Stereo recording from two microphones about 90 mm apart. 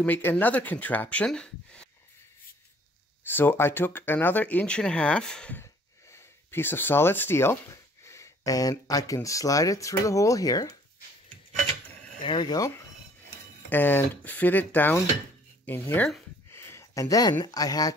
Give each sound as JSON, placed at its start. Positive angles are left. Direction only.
{"t": 0.0, "sound": "speech", "side_deg": 20}
{"t": 3.3, "sound": "speech", "side_deg": 25}
{"t": 5.6, "sound": "speech", "side_deg": 30}
{"t": 12.2, "sound": "speech", "side_deg": 60}
{"t": 13.7, "sound": "speech", "side_deg": 20}
{"t": 16.4, "sound": "a sound", "side_deg": 30}
{"t": 17.5, "sound": "speech", "side_deg": 45}